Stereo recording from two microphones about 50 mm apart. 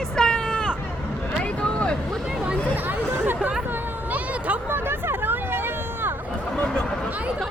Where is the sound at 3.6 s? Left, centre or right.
Right.